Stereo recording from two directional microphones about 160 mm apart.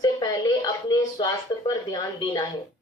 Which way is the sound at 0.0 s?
25° left (ahead or behind).